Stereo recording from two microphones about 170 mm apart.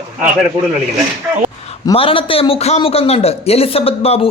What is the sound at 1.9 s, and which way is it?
Speech, 30° left (ahead or behind).